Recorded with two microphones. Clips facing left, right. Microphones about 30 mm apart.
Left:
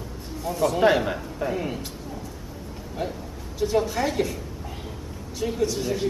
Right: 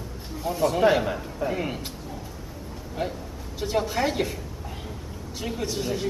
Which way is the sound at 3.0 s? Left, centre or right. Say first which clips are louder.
Even; centre.